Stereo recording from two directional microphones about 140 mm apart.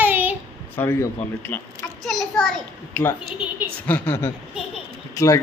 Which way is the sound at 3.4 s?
5° right (ahead or behind).